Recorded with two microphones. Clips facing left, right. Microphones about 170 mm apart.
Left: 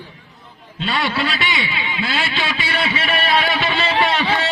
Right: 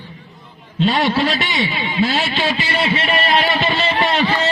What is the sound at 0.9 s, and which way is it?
A man's voice, 35° right (ahead or behind).